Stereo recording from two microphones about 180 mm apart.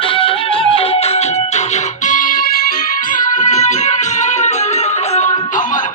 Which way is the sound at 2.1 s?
50° left (ahead or behind).